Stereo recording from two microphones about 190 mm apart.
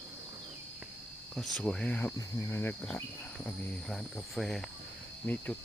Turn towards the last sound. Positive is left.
turn(degrees=10)  # may be behind; listen again after turning